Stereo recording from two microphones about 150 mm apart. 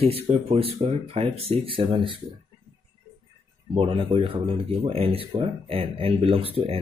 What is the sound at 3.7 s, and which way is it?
Speech, 40° right (ahead or behind).